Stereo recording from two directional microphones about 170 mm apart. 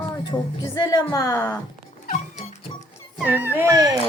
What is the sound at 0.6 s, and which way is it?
Speech, 20° left (ahead or behind).